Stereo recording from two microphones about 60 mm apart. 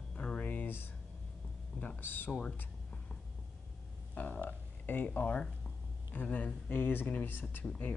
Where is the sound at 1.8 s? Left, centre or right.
Left.